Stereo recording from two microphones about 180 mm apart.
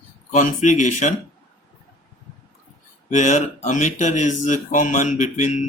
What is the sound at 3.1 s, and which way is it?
Speech, 40° left (ahead or behind).